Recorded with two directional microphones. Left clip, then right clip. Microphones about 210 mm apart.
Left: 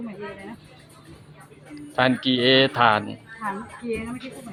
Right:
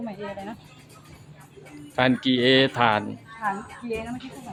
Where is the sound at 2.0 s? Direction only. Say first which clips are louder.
Left 1 dB; 10° right (ahead or behind).